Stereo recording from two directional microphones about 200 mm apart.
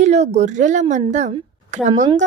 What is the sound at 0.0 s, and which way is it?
A woman's voice, 35° right (ahead or behind).